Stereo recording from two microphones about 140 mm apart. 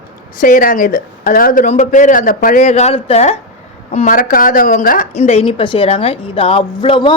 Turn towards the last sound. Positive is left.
turn(degrees=35)  # may be behind; listen again after turning